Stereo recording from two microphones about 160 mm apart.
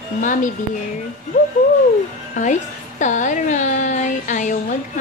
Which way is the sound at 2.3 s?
50° left (ahead or behind).